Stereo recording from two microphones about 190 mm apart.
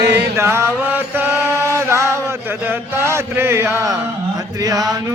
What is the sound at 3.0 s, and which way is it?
Speech, 15° right (ahead or behind).